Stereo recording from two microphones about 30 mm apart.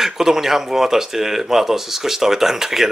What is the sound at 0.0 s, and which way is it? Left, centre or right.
Speech, centre.